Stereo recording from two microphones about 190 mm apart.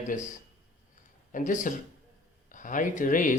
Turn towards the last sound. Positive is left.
turn(degrees=45)  # may be behind; listen again after turning